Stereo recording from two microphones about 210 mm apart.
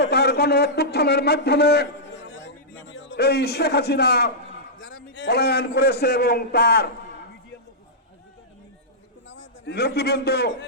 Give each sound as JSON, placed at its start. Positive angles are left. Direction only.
{"t": 0.0, "sound": "a man's voice", "side_deg": 50}
{"t": 9.3, "sound": "a man's voice", "side_deg": 55}